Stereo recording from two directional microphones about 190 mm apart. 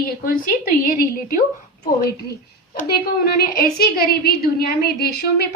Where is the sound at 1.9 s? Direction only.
50° left (ahead or behind).